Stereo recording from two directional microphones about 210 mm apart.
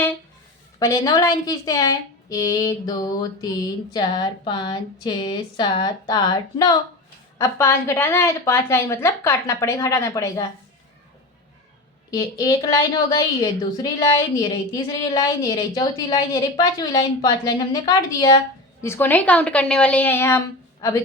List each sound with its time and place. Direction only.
0.8 s a woman's voice: 20° left (ahead or behind)
12.1 s a woman's voice: 15° left (ahead or behind)